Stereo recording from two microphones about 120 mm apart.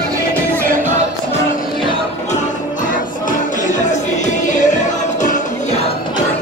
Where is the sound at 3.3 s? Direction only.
90° left; by 5.9 s 70° left (ahead or behind).